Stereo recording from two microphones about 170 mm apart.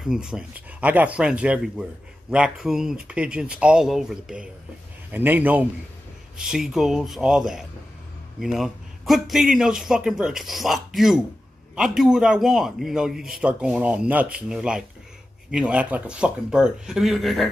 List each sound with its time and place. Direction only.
0.0 s a man's voice: 5° right (ahead or behind)